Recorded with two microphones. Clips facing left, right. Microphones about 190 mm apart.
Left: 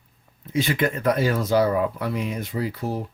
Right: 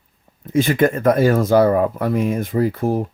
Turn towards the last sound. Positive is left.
turn(degrees=-50)  # may be behind; listen again after turning